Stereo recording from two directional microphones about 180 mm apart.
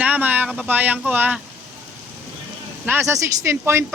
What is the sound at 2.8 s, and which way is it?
Speech, 15° right (ahead or behind).